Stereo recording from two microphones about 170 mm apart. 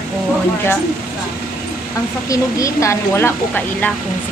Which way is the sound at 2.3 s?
20° left (ahead or behind).